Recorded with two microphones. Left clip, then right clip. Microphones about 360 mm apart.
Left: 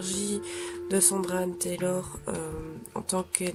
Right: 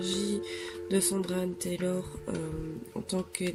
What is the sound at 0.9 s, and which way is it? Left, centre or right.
Speech, centre.